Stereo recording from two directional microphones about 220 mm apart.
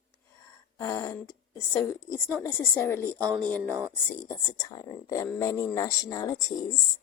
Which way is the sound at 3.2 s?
20° right (ahead or behind).